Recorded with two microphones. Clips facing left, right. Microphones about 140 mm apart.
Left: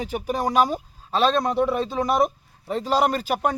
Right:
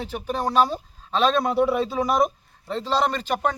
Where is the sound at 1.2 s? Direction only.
Centre (ahead or behind).